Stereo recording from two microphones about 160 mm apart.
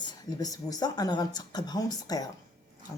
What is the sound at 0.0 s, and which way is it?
Speech, 25° left (ahead or behind).